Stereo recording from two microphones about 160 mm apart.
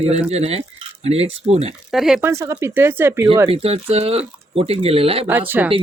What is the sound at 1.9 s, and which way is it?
Speech, centre (ahead or behind).